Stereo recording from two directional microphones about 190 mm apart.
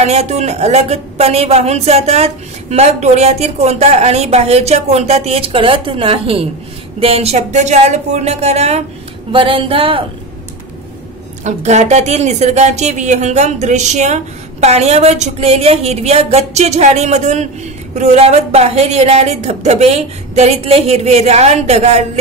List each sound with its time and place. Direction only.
0.0 s a woman's voice: 35° right (ahead or behind)
9.3 s a sound: 25° right (ahead or behind)
11.4 s a woman's voice: 35° right (ahead or behind)